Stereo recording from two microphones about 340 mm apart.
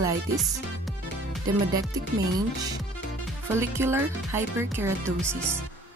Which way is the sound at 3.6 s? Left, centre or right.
Centre.